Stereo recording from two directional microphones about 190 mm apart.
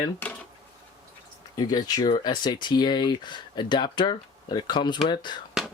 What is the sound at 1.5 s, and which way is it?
Speech, 20° left (ahead or behind).